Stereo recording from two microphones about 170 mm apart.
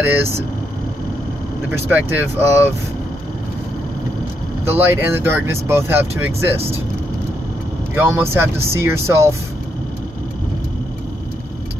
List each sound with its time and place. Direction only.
0.0 s speech: 15° right (ahead or behind)
1.9 s speech: 10° right (ahead or behind)
4.6 s speech: 15° right (ahead or behind)
7.9 s speech: 15° right (ahead or behind)